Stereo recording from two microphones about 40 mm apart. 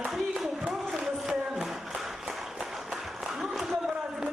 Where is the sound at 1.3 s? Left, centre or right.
Centre.